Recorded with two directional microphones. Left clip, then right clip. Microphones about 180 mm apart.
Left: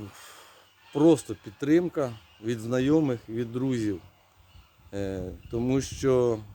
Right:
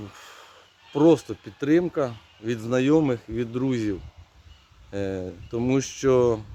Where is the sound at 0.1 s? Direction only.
Centre (ahead or behind).